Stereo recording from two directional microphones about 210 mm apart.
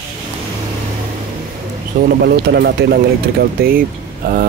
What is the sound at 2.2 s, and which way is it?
Speech, 50° right (ahead or behind).